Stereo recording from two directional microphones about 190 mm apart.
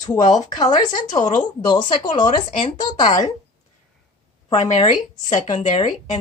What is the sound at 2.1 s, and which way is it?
A woman's voice, 25° left (ahead or behind).